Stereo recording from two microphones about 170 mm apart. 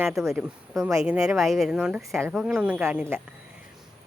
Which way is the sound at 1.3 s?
Centre (ahead or behind).